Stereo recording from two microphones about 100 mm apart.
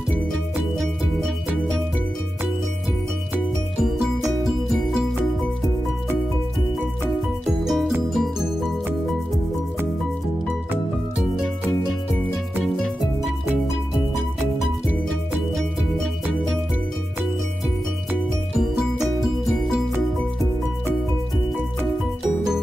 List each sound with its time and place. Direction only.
0.7 s music: 5° left (ahead or behind)
3.8 s music: centre (ahead or behind)
7.4 s music: centre (ahead or behind)